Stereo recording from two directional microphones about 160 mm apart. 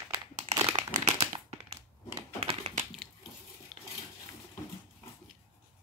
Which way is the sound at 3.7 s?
5° right (ahead or behind).